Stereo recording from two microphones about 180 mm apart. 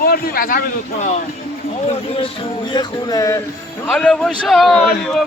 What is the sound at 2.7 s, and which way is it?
Music, 25° left (ahead or behind).